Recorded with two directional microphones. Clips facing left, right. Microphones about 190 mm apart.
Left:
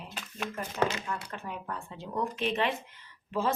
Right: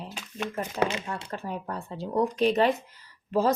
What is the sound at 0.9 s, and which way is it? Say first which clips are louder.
Speech: right 3 dB; 30° right (ahead or behind).